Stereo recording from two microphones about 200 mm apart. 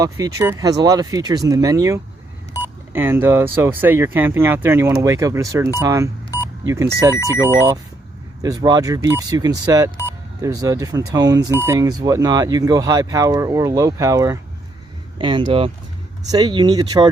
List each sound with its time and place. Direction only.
0.0 s speech: 15° right (ahead or behind)
8.4 s speech: 20° right (ahead or behind)